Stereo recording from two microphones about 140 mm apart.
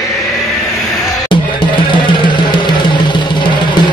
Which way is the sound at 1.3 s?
35° left (ahead or behind).